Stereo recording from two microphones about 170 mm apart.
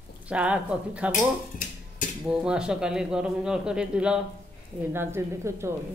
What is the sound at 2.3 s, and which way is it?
Speech, 5° right (ahead or behind).